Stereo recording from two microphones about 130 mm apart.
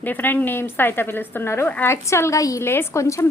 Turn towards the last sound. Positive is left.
turn(degrees=25)  # may be behind; listen again after turning